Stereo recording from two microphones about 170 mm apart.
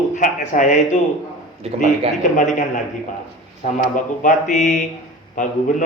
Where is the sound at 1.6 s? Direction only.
35° right (ahead or behind).